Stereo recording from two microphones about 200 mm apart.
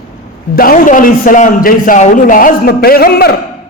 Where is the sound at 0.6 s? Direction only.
45° left (ahead or behind).